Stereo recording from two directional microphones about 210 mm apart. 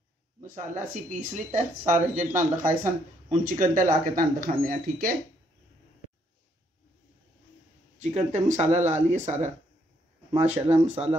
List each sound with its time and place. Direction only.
0.4 s speech: 35° right (ahead or behind)
8.0 s speech: 35° right (ahead or behind)